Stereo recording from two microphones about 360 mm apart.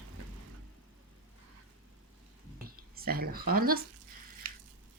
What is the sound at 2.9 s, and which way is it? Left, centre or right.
Speech, right.